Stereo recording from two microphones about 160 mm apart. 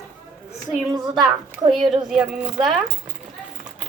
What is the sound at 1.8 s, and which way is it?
Speech, 30° right (ahead or behind).